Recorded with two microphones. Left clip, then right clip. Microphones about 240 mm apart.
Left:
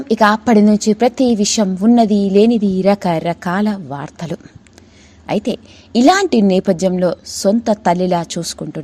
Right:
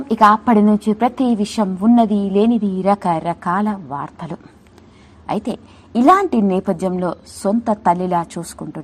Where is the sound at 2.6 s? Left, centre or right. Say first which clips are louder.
Left 3 dB; left.